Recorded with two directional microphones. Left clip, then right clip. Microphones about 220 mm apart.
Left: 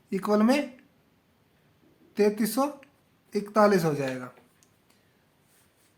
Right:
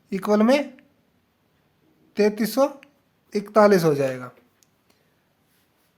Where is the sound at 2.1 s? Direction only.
35° right (ahead or behind).